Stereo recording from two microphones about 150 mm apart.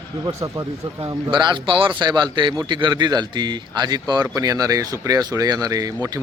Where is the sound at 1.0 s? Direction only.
30° right (ahead or behind).